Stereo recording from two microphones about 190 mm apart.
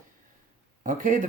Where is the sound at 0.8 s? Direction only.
45° right (ahead or behind).